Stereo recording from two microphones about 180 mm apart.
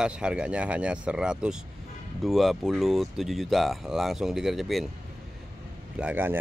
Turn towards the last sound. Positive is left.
turn(degrees=-10)  # may be behind; listen again after turning